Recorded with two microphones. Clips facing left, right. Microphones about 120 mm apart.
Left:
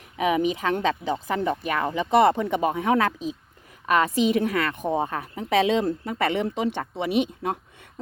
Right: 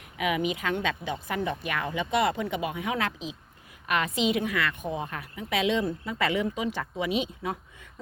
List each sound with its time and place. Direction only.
0.2 s a woman's voice: 35° left (ahead or behind)
4.9 s speech: 60° left (ahead or behind)
5.1 s speech: 35° left (ahead or behind); by 6.7 s 70° left (ahead or behind)
7.0 s speech: 45° left (ahead or behind)